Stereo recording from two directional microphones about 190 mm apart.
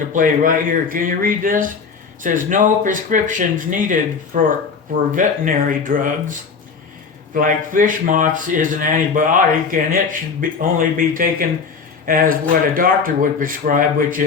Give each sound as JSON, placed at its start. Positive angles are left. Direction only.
{"t": 0.1, "sound": "speech", "side_deg": -45}
{"t": 7.3, "sound": "speech", "side_deg": -45}